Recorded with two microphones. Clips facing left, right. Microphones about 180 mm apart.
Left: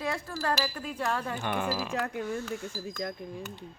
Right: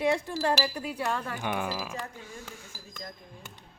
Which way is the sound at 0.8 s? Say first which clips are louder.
Even; 5° right (ahead or behind).